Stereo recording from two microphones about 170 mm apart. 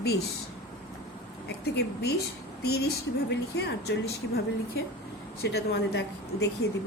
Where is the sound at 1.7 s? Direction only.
75° left (ahead or behind).